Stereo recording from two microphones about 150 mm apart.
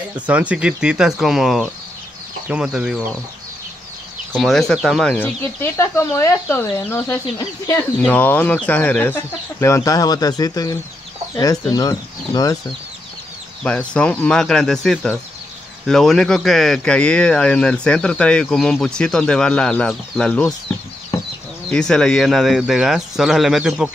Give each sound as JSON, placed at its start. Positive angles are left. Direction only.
{"t": 0.3, "sound": "speech", "side_deg": -10}
{"t": 4.3, "sound": "speech", "side_deg": 0}
{"t": 13.7, "sound": "speech", "side_deg": 5}
{"t": 21.6, "sound": "speech", "side_deg": 5}